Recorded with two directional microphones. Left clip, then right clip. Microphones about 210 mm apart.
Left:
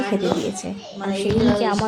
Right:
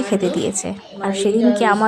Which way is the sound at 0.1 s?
20° right (ahead or behind).